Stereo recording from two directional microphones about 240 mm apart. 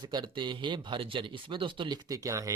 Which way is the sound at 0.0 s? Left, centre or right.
Centre.